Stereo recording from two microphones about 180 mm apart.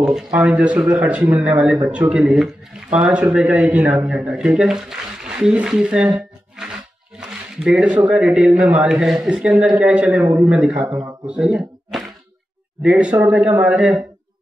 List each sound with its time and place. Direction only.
0.0 s speech: 5° right (ahead or behind)
10.9 s speech: 20° right (ahead or behind)
11.2 s speech: 5° right (ahead or behind)